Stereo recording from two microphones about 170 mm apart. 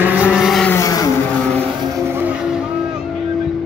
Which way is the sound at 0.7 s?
20° left (ahead or behind).